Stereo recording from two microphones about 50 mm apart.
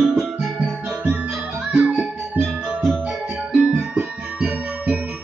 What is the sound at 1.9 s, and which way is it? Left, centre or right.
Music, right.